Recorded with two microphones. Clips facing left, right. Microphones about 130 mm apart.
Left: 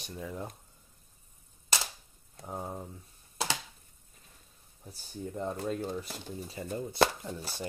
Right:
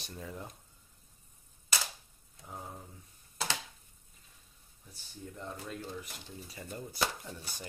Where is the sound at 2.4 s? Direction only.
40° left (ahead or behind).